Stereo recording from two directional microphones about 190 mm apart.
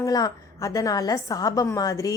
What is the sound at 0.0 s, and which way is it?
A woman's voice, 20° left (ahead or behind).